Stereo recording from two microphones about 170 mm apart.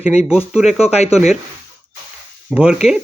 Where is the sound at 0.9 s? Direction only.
40° left (ahead or behind).